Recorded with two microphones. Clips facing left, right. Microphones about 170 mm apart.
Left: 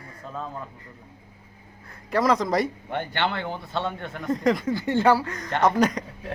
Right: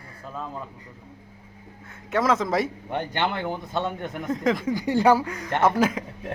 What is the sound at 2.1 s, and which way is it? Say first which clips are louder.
Speech: left 1 dB; centre (ahead or behind).